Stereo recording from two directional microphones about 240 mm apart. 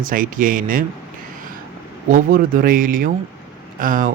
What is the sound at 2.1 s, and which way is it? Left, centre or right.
Speech, right.